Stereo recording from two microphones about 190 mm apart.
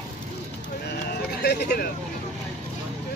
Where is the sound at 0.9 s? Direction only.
55° left (ahead or behind).